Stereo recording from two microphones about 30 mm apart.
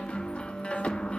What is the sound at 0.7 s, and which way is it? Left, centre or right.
Music, left.